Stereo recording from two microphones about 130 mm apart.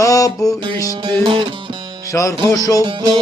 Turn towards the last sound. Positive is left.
turn(degrees=-35)  # may be behind; listen again after turning